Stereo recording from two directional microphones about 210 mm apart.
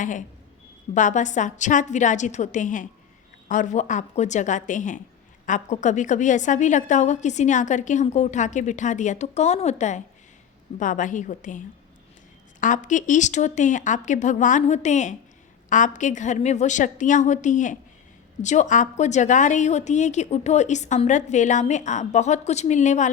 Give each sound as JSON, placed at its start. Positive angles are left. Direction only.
{"t": 0.0, "sound": "a woman's voice", "side_deg": 35}